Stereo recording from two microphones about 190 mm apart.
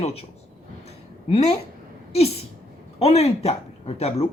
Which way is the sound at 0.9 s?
35° left (ahead or behind).